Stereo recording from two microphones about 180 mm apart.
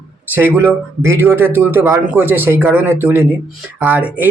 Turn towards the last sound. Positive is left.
turn(degrees=-10)  # may be behind; listen again after turning